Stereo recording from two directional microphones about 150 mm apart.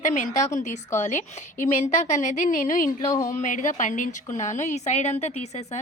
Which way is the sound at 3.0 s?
20° left (ahead or behind).